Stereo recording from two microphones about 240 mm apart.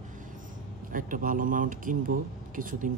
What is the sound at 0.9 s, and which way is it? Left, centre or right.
Speech, right.